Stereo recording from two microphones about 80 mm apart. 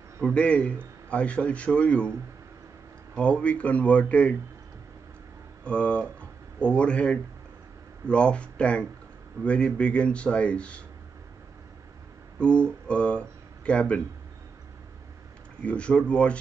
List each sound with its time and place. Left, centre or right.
0.3 s speech: centre
3.2 s speech: centre
5.6 s speech: centre
12.4 s speech: centre
15.6 s speech: centre